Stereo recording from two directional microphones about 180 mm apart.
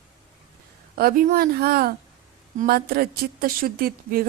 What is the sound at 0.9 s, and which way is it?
A woman's voice, 55° right (ahead or behind).